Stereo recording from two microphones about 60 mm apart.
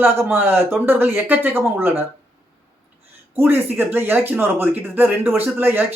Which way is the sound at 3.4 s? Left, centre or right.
Right.